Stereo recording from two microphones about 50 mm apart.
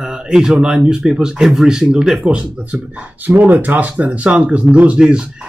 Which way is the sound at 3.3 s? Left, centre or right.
Right.